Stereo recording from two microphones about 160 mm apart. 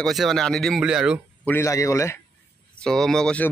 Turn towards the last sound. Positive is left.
turn(degrees=5)  # may be behind; listen again after turning